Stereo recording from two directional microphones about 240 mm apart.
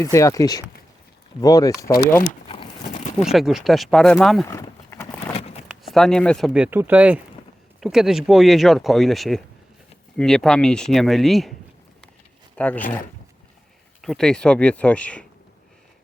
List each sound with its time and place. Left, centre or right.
0.0 s speech: centre
2.5 s a sound: left
3.3 s speech: centre
4.4 s clip-clop: centre
5.3 s a sound: left
5.6 s speech: centre
12.5 s speech: centre
14.0 s speech: centre